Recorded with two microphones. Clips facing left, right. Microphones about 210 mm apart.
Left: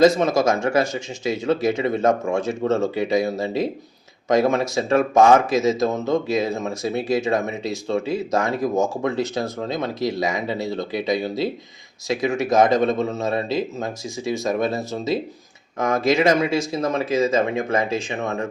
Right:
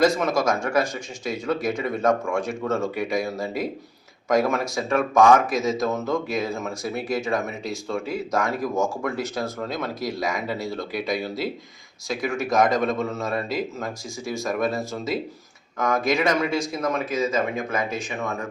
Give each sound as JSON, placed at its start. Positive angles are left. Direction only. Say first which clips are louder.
{"t": 0.0, "sound": "speech", "louder": "left 4 dB", "side_deg": 20}